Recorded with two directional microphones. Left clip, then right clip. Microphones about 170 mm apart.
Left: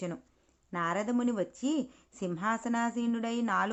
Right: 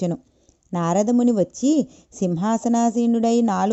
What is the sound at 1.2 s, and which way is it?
A woman's voice, 45° right (ahead or behind).